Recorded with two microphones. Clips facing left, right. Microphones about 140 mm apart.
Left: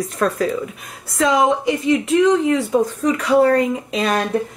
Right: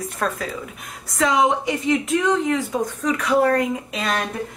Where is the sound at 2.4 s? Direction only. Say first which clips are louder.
Left 5 dB; 30° left (ahead or behind).